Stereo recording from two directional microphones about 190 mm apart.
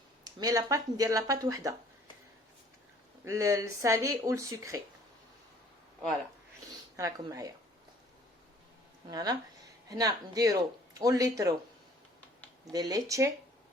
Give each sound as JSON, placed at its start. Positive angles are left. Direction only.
{"t": 0.3, "sound": "speech", "side_deg": -20}
{"t": 3.2, "sound": "speech", "side_deg": -15}
{"t": 6.9, "sound": "speech", "side_deg": -15}
{"t": 9.0, "sound": "speech", "side_deg": -20}
{"t": 12.7, "sound": "speech", "side_deg": -20}